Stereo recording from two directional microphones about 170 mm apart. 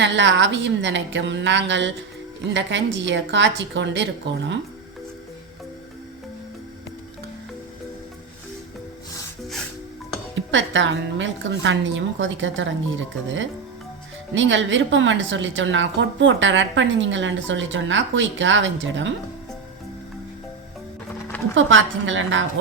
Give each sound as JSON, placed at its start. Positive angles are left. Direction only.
{"t": 0.0, "sound": "a woman's voice", "side_deg": -90}
{"t": 10.5, "sound": "a woman's voice", "side_deg": -90}
{"t": 21.7, "sound": "a woman's voice", "side_deg": -90}